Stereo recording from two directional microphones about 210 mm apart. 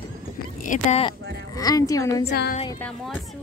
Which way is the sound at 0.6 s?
35° left (ahead or behind).